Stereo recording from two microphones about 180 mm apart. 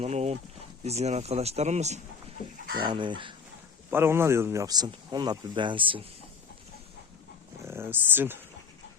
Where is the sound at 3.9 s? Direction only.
15° right (ahead or behind); by 6.0 s 30° right (ahead or behind).